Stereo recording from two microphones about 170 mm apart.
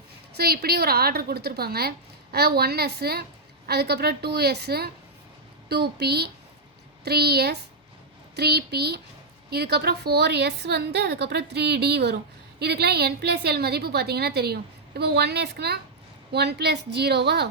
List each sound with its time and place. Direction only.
0.3 s a woman's voice: 65° right (ahead or behind)